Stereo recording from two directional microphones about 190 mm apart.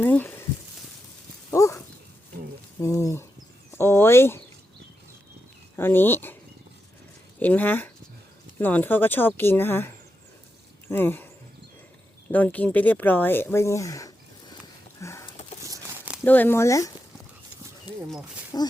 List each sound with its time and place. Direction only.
0.0 s speech: 10° left (ahead or behind)
1.5 s a sound: 15° left (ahead or behind)
2.8 s speech: 15° left (ahead or behind)
3.7 s a sound: 10° left (ahead or behind)
5.7 s speech: 10° left (ahead or behind)
7.3 s speech: 10° left (ahead or behind)
12.3 s speech: 10° left (ahead or behind)
15.0 s a sound: 15° left (ahead or behind)
15.6 s crumpling: 15° right (ahead or behind)
16.2 s speech: 10° left (ahead or behind)
18.5 s speech: 20° left (ahead or behind)